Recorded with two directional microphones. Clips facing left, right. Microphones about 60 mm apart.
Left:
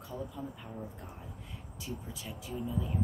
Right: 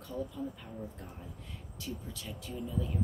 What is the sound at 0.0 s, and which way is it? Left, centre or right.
Speech, centre.